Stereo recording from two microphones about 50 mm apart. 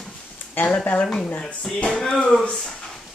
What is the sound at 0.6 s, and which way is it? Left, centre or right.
Speech, left.